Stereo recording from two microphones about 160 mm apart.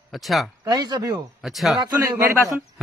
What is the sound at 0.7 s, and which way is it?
Speech, 25° right (ahead or behind).